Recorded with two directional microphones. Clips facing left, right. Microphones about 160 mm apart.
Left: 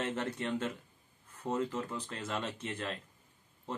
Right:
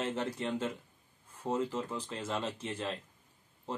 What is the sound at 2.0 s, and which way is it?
Speech, 10° right (ahead or behind).